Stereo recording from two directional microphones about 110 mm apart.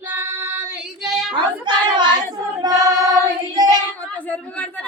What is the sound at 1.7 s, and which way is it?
Child singing, 45° right (ahead or behind).